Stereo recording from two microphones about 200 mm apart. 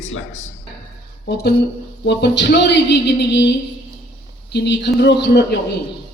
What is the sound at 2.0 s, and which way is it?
A man's voice, 60° left (ahead or behind).